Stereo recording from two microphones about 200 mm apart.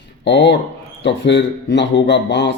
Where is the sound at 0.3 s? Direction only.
60° left (ahead or behind).